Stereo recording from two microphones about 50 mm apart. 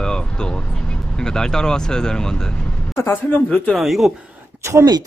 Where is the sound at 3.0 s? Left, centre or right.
Left.